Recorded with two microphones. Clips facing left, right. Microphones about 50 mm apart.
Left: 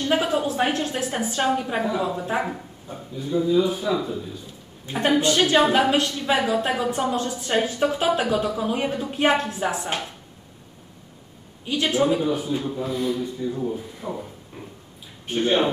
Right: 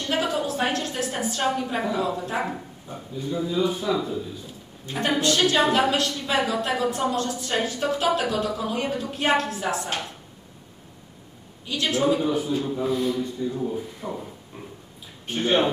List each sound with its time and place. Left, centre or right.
0.1 s a woman's voice: centre
2.4 s a man's voice: centre
4.8 s a woman's voice: left
11.6 s a woman's voice: left
12.0 s a man's voice: centre
14.5 s a sound: centre
15.3 s speech: centre